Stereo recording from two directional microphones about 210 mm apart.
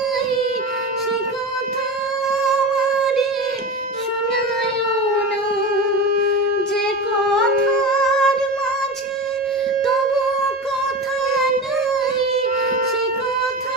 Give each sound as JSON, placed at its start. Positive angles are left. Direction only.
{"t": 2.3, "sound": "music", "side_deg": 0}
{"t": 6.1, "sound": "shofar", "side_deg": -45}
{"t": 7.9, "sound": "music", "side_deg": 5}